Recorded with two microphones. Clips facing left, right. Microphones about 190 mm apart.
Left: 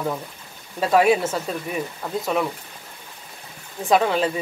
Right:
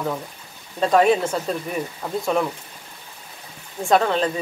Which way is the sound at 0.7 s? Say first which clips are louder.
Right 1 dB; 5° left (ahead or behind).